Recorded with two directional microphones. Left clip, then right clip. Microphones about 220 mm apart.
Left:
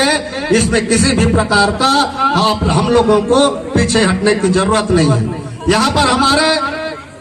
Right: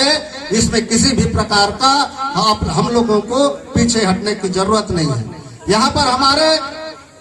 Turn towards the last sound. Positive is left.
turn(degrees=-30)  # may be behind; listen again after turning